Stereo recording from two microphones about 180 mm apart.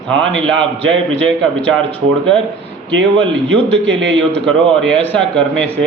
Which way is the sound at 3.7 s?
80° right.